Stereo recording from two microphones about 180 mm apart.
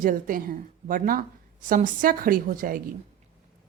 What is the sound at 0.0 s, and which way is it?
A woman's voice, 50° right (ahead or behind).